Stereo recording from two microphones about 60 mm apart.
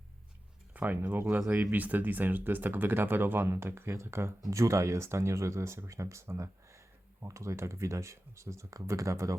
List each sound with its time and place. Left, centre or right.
0.7 s speech: right
4.4 s speech: right